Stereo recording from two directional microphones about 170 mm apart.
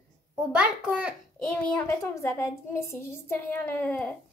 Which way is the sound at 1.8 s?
15° left (ahead or behind).